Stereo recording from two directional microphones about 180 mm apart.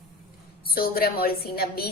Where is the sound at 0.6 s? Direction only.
55° left (ahead or behind).